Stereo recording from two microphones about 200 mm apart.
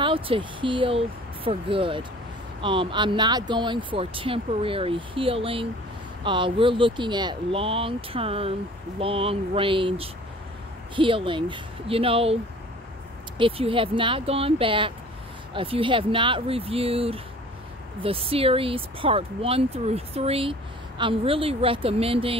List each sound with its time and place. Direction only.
0.0 s speech: 25° right (ahead or behind)
13.4 s speech: 25° right (ahead or behind)